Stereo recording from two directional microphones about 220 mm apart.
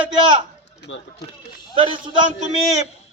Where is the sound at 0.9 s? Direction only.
60° left (ahead or behind).